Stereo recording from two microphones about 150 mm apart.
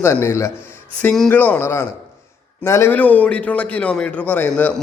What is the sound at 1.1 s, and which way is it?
A man's voice, 5° left (ahead or behind).